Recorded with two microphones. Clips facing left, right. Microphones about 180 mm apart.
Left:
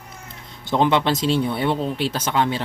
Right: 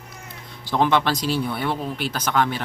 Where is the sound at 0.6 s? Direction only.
20° left (ahead or behind).